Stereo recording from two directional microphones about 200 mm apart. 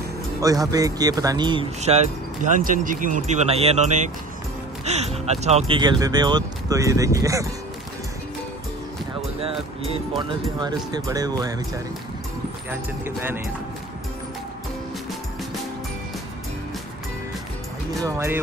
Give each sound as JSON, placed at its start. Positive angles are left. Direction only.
{"t": 0.4, "sound": "a man's voice", "side_deg": -15}
{"t": 2.4, "sound": "speech", "side_deg": -40}
{"t": 5.8, "sound": "speech", "side_deg": -20}
{"t": 11.1, "sound": "a man's voice", "side_deg": -20}
{"t": 13.0, "sound": "speech", "side_deg": -10}
{"t": 18.0, "sound": "speech", "side_deg": -15}